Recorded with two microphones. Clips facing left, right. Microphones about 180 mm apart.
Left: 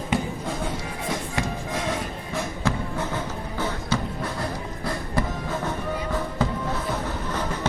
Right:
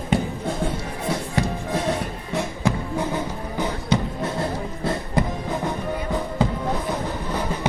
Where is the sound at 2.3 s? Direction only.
15° right (ahead or behind).